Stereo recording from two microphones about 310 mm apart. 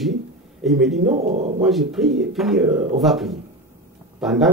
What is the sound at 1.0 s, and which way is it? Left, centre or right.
Speech, right.